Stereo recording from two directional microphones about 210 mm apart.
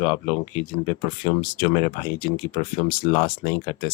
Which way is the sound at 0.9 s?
20° left (ahead or behind).